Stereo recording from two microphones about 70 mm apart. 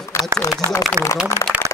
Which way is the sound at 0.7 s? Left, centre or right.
Left.